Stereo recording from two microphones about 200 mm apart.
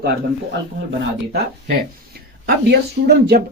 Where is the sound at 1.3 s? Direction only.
50° right (ahead or behind).